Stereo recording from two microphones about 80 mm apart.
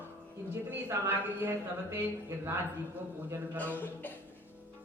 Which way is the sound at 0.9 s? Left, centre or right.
Right.